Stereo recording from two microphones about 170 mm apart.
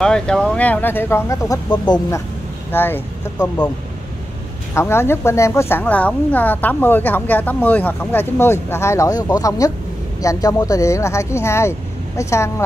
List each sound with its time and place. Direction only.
0.0 s a woman's voice: 5° left (ahead or behind)
4.7 s a woman's voice: 15° left (ahead or behind)